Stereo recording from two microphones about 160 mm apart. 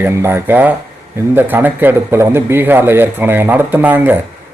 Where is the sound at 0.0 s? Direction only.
15° right (ahead or behind).